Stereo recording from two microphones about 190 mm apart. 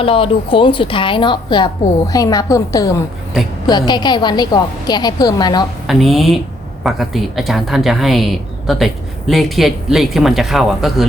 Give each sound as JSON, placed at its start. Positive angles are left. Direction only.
{"t": 0.0, "sound": "a woman's voice", "side_deg": 30}
{"t": 5.9, "sound": "speech", "side_deg": 0}